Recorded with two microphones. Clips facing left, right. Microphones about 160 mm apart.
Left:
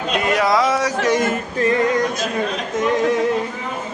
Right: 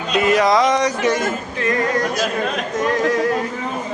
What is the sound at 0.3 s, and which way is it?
Speech, centre (ahead or behind).